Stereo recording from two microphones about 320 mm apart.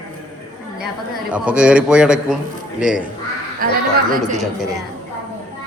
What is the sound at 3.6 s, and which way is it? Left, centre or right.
Speech, right.